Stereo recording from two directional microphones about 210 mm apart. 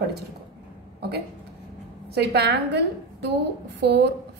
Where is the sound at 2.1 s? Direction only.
50° right (ahead or behind).